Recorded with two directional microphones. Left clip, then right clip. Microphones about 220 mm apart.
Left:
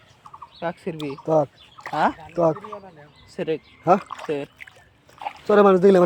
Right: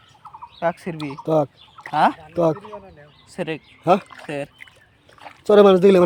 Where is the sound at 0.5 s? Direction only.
40° right (ahead or behind).